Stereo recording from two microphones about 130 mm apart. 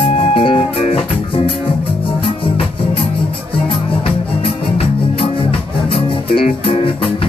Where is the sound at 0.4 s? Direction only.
45° left (ahead or behind).